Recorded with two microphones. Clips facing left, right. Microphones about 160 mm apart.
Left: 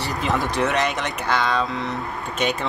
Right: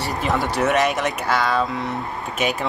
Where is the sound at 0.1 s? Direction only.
Centre (ahead or behind).